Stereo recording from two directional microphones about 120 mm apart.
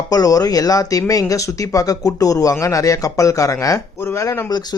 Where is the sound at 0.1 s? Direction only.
30° left (ahead or behind).